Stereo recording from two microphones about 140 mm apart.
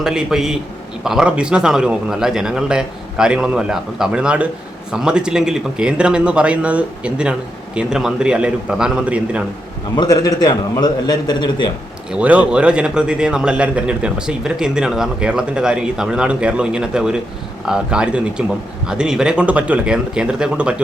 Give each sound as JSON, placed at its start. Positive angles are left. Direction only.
{"t": 0.0, "sound": "a man's voice", "side_deg": -5}
{"t": 9.9, "sound": "a man's voice", "side_deg": 30}
{"t": 12.1, "sound": "a man's voice", "side_deg": -10}